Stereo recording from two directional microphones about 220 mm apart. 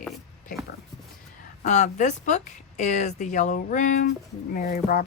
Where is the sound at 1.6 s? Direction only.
30° left (ahead or behind).